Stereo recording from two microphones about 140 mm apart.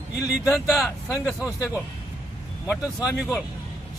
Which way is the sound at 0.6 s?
Centre (ahead or behind).